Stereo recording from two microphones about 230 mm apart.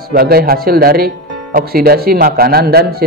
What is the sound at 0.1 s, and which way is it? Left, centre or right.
Speech, right.